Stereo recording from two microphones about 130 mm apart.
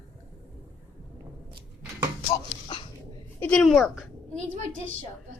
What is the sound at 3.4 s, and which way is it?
Speech, 10° left (ahead or behind).